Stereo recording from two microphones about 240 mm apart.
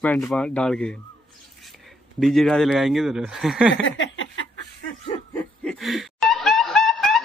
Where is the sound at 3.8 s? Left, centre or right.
Left.